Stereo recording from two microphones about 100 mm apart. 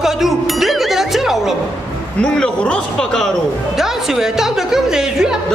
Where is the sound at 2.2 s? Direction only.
10° left (ahead or behind).